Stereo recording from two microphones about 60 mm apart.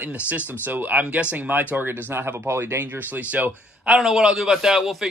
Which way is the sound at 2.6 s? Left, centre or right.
Right.